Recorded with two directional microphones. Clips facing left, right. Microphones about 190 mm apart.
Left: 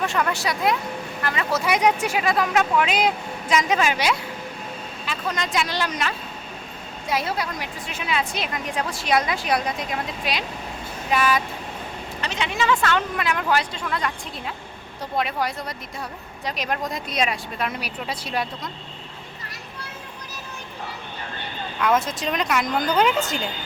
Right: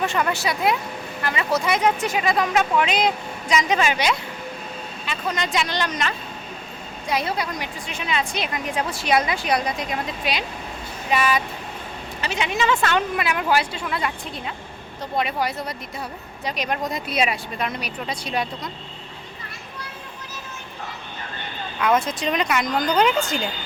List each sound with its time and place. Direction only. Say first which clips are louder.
0.0 s a woman's voice: right 1 dB; centre (ahead or behind)
1.7 s a woman's voice: left 3 dB; 15° left (ahead or behind); by 12.5 s 10° right (ahead or behind)
12.5 s a woman's voice: even; 20° right (ahead or behind); by 17.7 s 5° right (ahead or behind)
17.7 s a woman's voice: right 1 dB; 5° left (ahead or behind)
21.8 s a woman's voice: right 1 dB; centre (ahead or behind)